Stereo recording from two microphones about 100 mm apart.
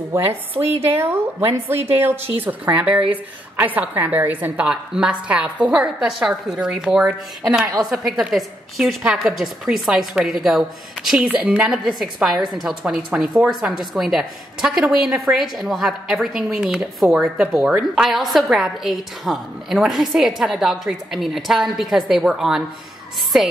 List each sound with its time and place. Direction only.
0.1 s a woman's voice: 20° right (ahead or behind); by 22.6 s 5° right (ahead or behind)